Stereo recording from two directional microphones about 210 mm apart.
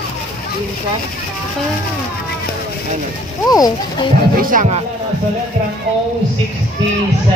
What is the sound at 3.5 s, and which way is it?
Speech, 20° left (ahead or behind).